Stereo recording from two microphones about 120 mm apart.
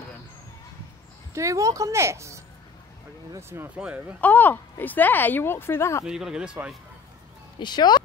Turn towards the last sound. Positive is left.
turn(degrees=35)  # may be behind; listen again after turning